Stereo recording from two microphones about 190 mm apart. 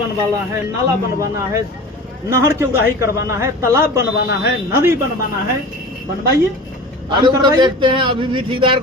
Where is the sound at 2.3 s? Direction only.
15° right (ahead or behind).